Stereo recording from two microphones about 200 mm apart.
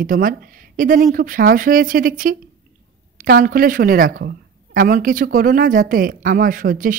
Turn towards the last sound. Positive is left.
turn(degrees=-45)  # may be behind; listen again after turning